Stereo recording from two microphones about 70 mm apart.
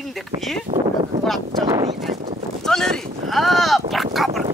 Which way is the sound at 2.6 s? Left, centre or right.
Centre.